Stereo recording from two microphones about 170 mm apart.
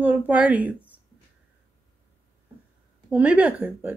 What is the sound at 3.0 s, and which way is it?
Speech, 10° right (ahead or behind).